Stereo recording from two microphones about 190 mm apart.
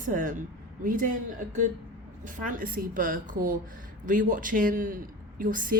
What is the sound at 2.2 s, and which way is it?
Speech, 45° right (ahead or behind).